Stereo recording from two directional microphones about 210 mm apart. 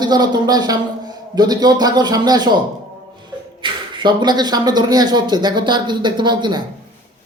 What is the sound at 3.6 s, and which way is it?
Speech, 25° right (ahead or behind).